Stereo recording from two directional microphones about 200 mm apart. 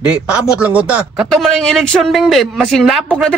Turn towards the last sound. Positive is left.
turn(degrees=5)  # may be behind; listen again after turning